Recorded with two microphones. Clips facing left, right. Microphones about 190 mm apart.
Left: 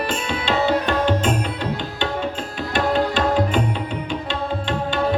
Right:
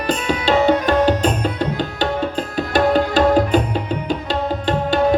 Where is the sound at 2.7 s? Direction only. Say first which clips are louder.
Right 4 dB; 40° right (ahead or behind).